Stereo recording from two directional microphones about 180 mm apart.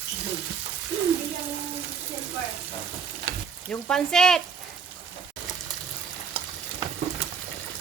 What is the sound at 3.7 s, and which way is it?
Speech, 5° left (ahead or behind).